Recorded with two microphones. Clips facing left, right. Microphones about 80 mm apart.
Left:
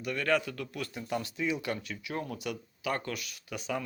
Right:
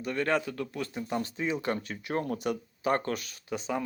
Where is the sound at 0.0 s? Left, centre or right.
Right.